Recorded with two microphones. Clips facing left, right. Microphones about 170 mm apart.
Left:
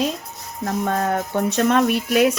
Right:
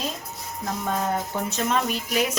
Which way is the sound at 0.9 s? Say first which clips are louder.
Left 2 dB; 60° left (ahead or behind).